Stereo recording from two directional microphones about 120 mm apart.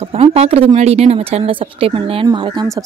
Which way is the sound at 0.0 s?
55° right (ahead or behind).